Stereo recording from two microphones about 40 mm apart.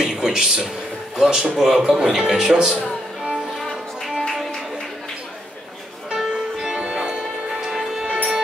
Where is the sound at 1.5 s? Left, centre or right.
Centre.